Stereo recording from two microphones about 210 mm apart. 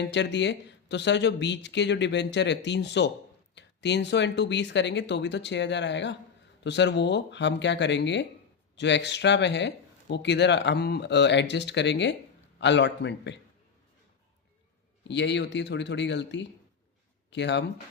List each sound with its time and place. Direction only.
0.0 s speech: 55° left (ahead or behind)
15.0 s speech: 55° left (ahead or behind)